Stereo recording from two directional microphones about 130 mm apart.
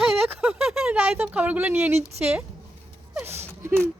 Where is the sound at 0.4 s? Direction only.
5° right (ahead or behind).